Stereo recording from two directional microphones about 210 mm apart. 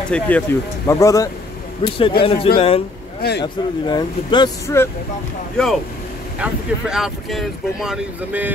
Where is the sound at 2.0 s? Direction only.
25° left (ahead or behind).